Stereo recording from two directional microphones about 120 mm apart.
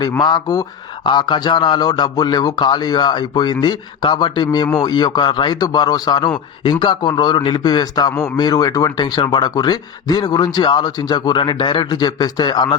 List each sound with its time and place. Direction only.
0.2 s a man's voice: 35° left (ahead or behind)